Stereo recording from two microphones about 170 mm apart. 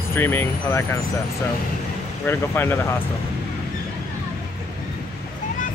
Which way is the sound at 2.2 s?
10° left (ahead or behind).